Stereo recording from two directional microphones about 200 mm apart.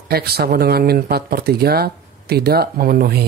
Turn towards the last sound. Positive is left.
turn(degrees=-50)  # may be behind; listen again after turning